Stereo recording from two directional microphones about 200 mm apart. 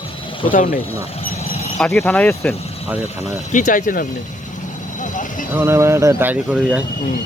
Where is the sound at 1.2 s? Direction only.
35° left (ahead or behind).